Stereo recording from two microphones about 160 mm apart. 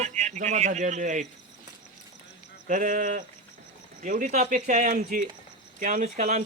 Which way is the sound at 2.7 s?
55° right (ahead or behind).